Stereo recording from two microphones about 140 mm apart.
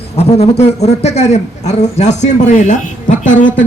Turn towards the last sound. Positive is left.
turn(degrees=65)  # may be behind; listen again after turning